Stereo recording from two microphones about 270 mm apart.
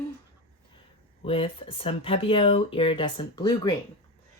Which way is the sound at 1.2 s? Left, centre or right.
Centre.